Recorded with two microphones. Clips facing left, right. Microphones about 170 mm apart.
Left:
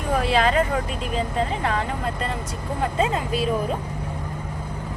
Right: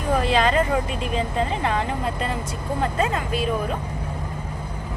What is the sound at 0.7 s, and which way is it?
Speech, centre (ahead or behind).